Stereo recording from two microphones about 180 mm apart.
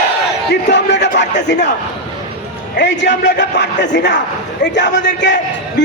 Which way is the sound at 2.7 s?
75° left (ahead or behind).